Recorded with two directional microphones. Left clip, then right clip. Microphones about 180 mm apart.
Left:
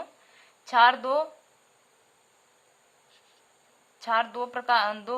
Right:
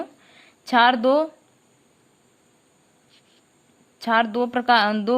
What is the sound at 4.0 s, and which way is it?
A woman's voice, 35° right (ahead or behind).